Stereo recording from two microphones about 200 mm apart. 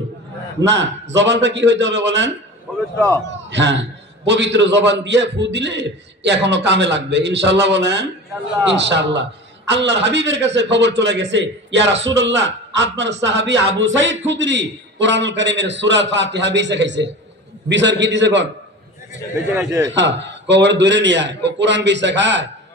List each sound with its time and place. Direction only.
0.6 s a man's voice: 65° right (ahead or behind)
3.4 s a man's voice: 65° right (ahead or behind)
19.9 s a man's voice: 60° right (ahead or behind)